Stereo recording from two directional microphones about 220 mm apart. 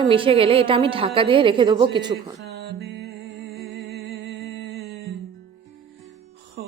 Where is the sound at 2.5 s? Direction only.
50° right (ahead or behind).